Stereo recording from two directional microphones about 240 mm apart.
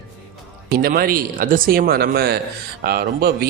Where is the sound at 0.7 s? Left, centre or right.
Right.